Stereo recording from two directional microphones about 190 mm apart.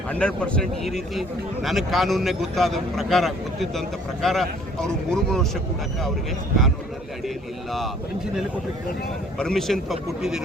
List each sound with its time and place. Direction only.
0.1 s a man's voice: 5° left (ahead or behind)
9.4 s a man's voice: centre (ahead or behind)